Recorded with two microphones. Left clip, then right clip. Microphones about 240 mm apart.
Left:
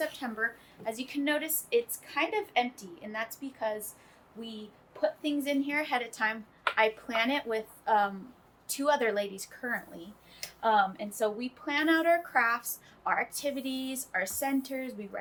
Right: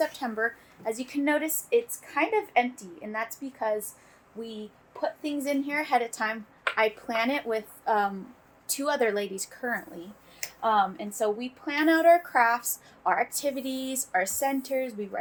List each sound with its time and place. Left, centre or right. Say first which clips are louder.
0.0 s a woman's voice: right 5 dB; right
4.9 s a woman's voice: even; right